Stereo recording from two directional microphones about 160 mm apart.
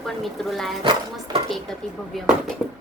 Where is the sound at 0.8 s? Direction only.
30° right (ahead or behind).